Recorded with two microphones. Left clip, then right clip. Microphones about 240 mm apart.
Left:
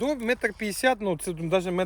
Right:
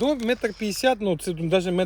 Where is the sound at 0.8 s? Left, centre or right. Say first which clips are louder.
Right 2 dB; centre.